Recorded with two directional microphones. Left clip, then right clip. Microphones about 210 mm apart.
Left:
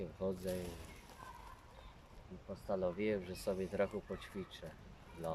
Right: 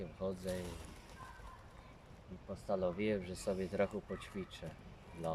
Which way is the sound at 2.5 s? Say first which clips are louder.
Right 1 dB; centre (ahead or behind).